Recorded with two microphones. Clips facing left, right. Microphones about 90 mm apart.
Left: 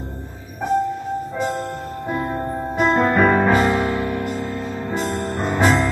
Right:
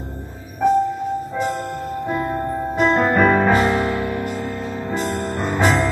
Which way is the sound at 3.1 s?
Centre (ahead or behind).